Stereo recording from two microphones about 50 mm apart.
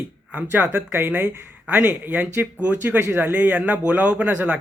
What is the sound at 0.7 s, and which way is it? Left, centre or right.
Speech, right.